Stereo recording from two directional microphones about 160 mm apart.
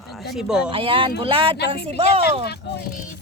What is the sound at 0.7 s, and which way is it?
Speech, 35° right (ahead or behind).